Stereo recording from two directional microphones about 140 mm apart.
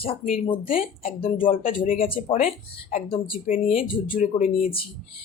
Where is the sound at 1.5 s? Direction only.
80° left.